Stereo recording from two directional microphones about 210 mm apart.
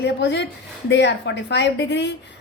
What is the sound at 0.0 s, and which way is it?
A woman's voice, 55° left (ahead or behind).